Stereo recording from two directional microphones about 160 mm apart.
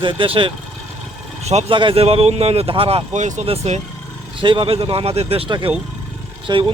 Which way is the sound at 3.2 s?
50° right (ahead or behind).